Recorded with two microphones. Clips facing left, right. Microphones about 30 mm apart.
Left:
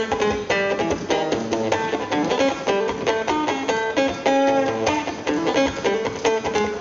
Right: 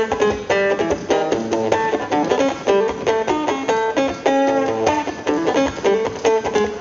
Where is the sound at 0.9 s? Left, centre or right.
Centre.